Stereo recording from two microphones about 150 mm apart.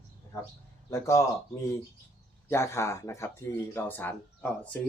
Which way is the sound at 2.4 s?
15° left (ahead or behind).